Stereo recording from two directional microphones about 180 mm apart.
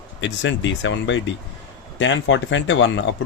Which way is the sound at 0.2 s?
90° left.